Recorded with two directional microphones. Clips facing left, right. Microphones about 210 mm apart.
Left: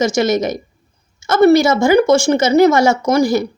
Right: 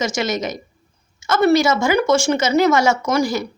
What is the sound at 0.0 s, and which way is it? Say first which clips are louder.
Speech: left 7 dB; 35° left (ahead or behind).